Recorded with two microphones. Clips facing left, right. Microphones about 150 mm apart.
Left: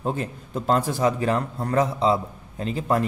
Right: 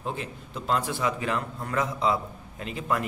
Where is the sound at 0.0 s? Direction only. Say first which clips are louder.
Left 6 dB; 45° left (ahead or behind).